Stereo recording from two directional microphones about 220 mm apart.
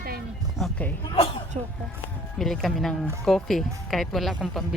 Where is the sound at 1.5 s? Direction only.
30° right (ahead or behind).